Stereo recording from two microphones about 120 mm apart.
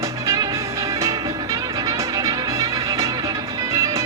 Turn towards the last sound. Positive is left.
turn(degrees=-25)  # may be behind; listen again after turning